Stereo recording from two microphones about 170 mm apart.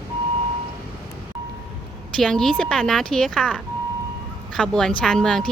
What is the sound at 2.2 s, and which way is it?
Speech, centre (ahead or behind).